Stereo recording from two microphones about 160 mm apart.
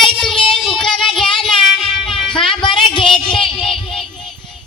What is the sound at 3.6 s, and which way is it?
Child singing, 5° left (ahead or behind).